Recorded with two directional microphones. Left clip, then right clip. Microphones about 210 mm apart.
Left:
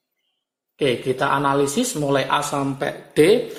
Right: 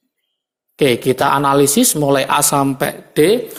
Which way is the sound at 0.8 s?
35° right (ahead or behind).